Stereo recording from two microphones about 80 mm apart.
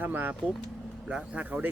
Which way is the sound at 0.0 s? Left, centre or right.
Right.